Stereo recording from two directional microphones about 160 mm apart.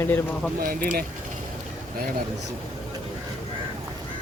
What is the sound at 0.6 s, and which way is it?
Speech, 60° right (ahead or behind).